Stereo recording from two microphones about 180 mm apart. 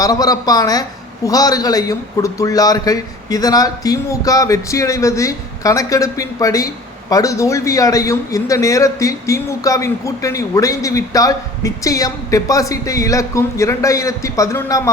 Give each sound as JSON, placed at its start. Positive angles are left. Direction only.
{"t": 0.0, "sound": "a man's voice", "side_deg": 20}